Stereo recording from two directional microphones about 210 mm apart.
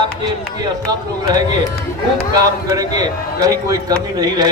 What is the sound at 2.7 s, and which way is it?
A man's voice, 15° right (ahead or behind).